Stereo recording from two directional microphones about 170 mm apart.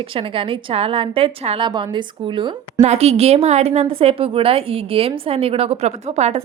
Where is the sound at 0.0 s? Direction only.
30° right (ahead or behind).